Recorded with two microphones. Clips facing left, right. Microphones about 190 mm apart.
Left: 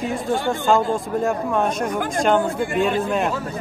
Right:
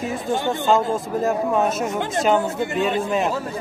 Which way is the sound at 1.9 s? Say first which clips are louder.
Even; 25° right (ahead or behind).